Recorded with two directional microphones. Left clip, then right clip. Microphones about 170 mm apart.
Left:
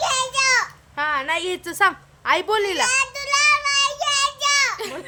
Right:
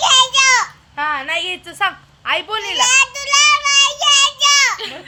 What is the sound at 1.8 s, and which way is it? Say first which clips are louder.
A woman's voice: left 1 dB; 35° left (ahead or behind).